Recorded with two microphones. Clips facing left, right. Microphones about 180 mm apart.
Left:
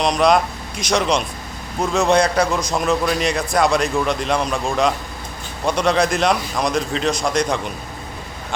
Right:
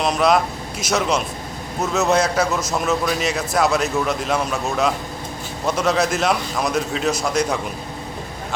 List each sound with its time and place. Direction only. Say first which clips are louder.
0.0 s a man's voice: left 1 dB; 5° right (ahead or behind)